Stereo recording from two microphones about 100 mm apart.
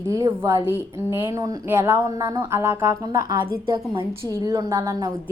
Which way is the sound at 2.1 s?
40° right (ahead or behind).